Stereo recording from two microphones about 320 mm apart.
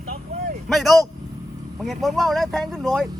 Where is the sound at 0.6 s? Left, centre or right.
Centre.